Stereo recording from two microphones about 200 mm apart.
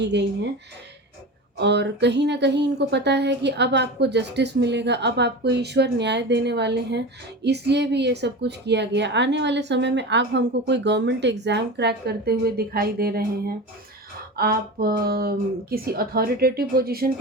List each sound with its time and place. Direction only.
0.0 s a woman's voice: 60° right (ahead or behind)
1.5 s a woman's voice: 60° right (ahead or behind)
14.3 s speech: 50° right (ahead or behind)